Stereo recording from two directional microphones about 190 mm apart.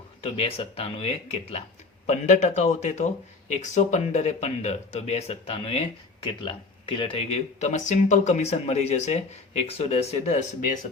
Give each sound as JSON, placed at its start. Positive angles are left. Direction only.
{"t": 0.2, "sound": "speech", "side_deg": 30}